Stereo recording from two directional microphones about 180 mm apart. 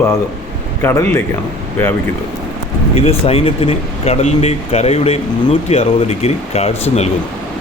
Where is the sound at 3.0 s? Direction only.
35° left (ahead or behind).